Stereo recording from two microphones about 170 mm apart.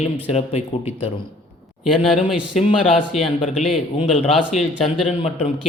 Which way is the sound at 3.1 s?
Centre (ahead or behind).